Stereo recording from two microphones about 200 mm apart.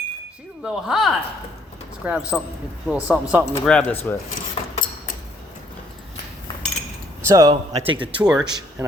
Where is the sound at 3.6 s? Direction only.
5° left (ahead or behind).